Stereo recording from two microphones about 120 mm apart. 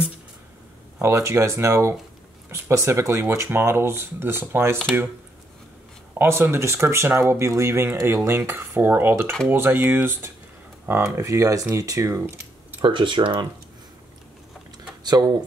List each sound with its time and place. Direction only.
1.0 s speech: 25° right (ahead or behind)
6.1 s speech: 20° right (ahead or behind)
12.8 s speech: 40° right (ahead or behind)
15.0 s speech: 35° right (ahead or behind)